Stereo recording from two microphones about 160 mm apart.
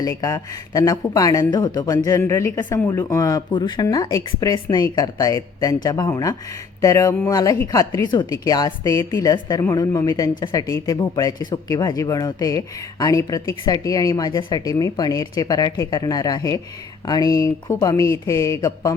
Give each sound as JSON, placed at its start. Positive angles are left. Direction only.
{"t": 0.0, "sound": "a woman's voice", "side_deg": 20}